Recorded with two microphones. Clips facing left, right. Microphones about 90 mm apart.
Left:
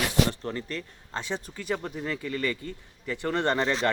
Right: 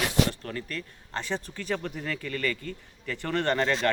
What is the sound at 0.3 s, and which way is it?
Speech, 25° left (ahead or behind).